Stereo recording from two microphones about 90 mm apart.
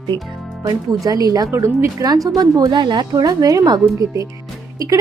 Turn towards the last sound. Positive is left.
turn(degrees=-40)  # may be behind; listen again after turning